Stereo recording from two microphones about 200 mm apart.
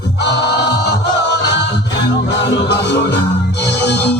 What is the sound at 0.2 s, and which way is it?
Music, 55° left (ahead or behind).